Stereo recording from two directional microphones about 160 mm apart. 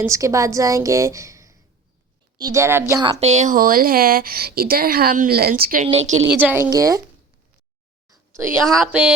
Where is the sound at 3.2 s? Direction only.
45° right (ahead or behind).